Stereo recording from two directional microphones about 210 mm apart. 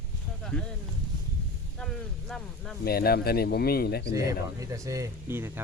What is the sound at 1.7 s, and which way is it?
Speech, 5° left (ahead or behind).